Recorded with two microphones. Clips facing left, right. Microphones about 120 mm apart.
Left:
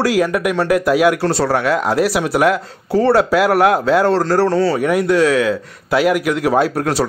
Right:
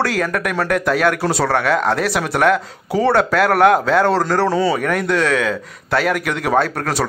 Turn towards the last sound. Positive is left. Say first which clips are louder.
# left 2 dB
turn(degrees=5)  # may be behind; listen again after turning